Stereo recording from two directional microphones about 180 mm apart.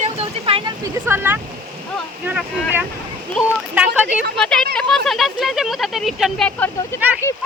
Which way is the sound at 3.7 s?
10° right (ahead or behind).